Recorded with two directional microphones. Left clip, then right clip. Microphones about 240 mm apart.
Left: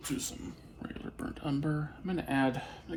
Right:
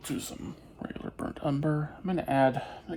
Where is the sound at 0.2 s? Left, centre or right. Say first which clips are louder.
Right 1 dB; right.